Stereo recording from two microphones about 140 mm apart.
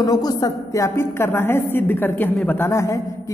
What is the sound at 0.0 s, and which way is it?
A woman's voice, 25° left (ahead or behind).